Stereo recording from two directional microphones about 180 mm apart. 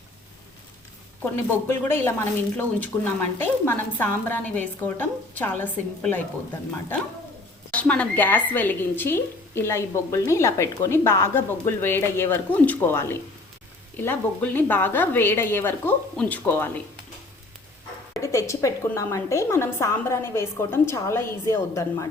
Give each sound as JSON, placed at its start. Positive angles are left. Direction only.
{"t": 1.2, "sound": "a woman's voice", "side_deg": 10}
{"t": 7.7, "sound": "a woman's voice", "side_deg": 10}
{"t": 18.2, "sound": "a woman's voice", "side_deg": 15}